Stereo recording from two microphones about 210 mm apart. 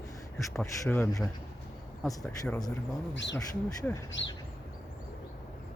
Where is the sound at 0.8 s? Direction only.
15° left (ahead or behind).